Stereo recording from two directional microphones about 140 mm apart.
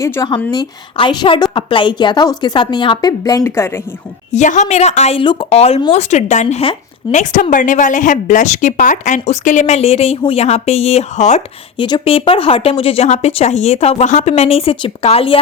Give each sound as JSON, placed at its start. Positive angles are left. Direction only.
{"t": 0.0, "sound": "a woman's voice", "side_deg": 20}
{"t": 0.5, "sound": "a woman's voice", "side_deg": 35}
{"t": 4.3, "sound": "speech", "side_deg": 60}
{"t": 5.2, "sound": "speech", "side_deg": 35}
{"t": 7.5, "sound": "speech", "side_deg": 65}
{"t": 11.8, "sound": "speech", "side_deg": 35}